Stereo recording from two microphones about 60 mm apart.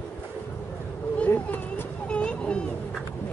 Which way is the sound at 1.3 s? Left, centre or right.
Left.